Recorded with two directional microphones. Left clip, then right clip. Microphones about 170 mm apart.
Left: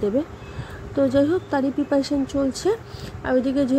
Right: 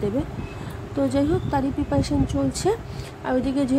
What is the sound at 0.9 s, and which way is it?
Speech, 15° left (ahead or behind).